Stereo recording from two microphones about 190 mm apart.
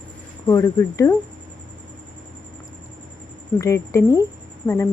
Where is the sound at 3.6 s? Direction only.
15° left (ahead or behind).